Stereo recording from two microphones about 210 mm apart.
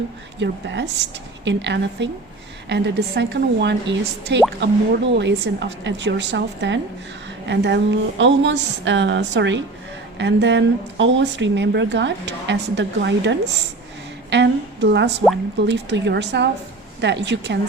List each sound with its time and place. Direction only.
0.3 s a woman's voice: 55° right (ahead or behind)